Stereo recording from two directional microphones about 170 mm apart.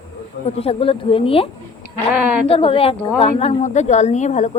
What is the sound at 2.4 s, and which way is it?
A woman's voice, 30° left (ahead or behind).